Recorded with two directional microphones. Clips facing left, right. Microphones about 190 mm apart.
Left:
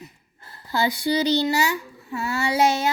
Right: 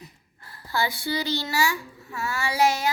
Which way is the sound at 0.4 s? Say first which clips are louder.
Left 4 dB; 20° left (ahead or behind).